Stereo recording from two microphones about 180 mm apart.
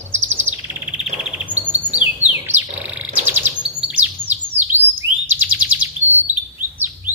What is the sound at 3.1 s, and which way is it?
Chirp, 10° right (ahead or behind).